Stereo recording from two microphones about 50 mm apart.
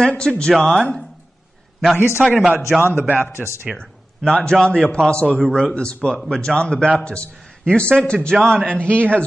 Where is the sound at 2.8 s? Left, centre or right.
Right.